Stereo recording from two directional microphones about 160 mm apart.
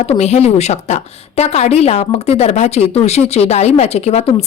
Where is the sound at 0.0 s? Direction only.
40° left (ahead or behind).